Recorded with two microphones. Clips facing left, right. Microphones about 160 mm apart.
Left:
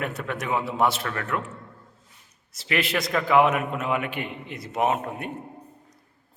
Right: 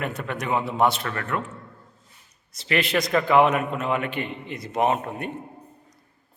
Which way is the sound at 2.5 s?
5° left (ahead or behind).